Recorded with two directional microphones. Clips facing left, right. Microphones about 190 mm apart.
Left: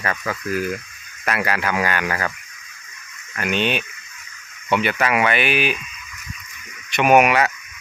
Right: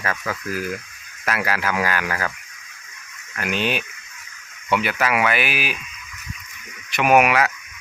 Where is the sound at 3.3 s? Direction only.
5° right (ahead or behind).